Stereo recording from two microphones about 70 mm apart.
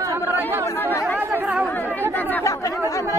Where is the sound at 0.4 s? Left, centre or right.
Right.